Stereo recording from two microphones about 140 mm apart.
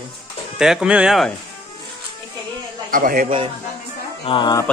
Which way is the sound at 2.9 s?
85° right.